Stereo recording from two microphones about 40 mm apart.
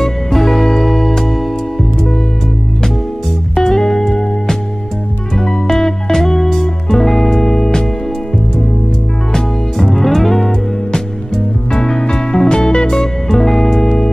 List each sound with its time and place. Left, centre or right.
0.0 s music: centre
3.5 s music: centre
9.9 s music: centre
10.9 s music: centre